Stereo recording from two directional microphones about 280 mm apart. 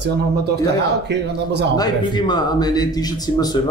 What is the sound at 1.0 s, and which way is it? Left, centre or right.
Speech, right.